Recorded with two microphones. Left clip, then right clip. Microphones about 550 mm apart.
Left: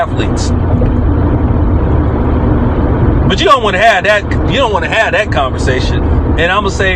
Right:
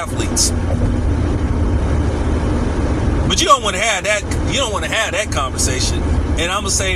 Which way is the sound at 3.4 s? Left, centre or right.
Right.